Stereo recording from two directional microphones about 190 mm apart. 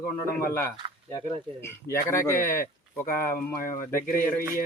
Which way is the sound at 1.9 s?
15° left (ahead or behind).